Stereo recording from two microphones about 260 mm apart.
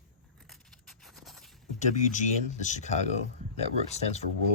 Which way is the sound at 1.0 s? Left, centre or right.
Centre.